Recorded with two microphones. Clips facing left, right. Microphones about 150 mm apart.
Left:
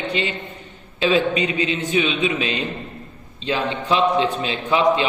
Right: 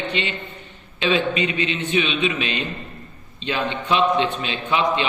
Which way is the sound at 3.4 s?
30° left (ahead or behind).